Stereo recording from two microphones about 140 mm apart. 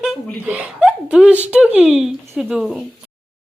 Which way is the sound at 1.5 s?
10° right (ahead or behind).